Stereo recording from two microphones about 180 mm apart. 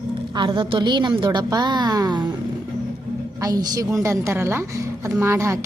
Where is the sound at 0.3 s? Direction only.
25° right (ahead or behind).